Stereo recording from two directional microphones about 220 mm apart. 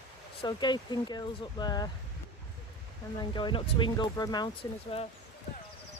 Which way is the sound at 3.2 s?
20° left (ahead or behind).